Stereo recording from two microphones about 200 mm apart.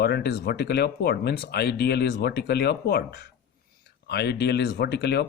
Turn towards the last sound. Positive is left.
turn(degrees=55)  # may be behind; listen again after turning